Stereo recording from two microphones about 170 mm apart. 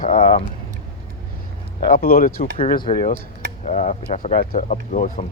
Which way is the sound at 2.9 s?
30° left (ahead or behind).